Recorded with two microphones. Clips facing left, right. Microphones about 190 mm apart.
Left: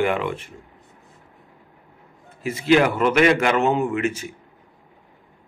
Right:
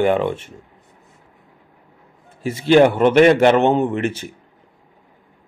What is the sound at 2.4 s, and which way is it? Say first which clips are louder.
A man's voice: right 5 dB; 30° right (ahead or behind).